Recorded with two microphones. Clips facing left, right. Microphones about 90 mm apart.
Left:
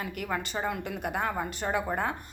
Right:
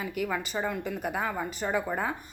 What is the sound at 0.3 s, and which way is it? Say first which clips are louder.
Speech: even; 5° left (ahead or behind).